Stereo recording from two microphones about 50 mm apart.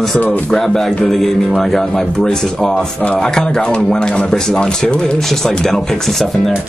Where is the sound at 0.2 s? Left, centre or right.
Left.